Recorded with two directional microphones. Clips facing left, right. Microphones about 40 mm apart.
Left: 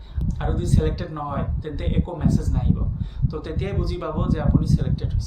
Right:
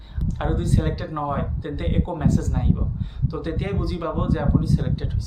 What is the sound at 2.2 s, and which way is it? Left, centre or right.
Speech, right.